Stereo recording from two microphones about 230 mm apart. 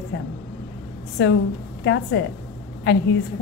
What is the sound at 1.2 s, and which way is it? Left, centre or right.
A woman's voice, left.